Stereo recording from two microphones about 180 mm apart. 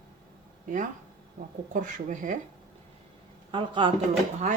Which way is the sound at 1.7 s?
45° right (ahead or behind).